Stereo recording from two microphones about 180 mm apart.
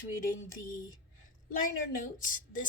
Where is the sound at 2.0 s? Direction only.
45° left (ahead or behind).